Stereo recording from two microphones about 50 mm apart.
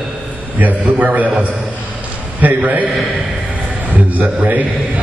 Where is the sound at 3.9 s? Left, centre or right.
Right.